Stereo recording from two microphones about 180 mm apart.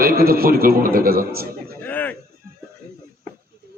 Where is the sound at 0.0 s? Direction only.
55° right (ahead or behind).